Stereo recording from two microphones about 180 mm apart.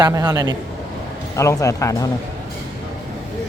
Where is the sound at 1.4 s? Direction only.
15° left (ahead or behind).